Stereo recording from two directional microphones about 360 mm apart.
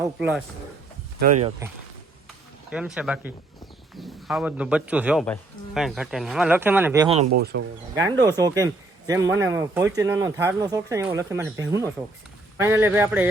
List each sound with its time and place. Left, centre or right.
0.0 s speech: centre
1.2 s speech: centre
2.6 s speech: centre
7.5 s speech: right
8.2 s speech: centre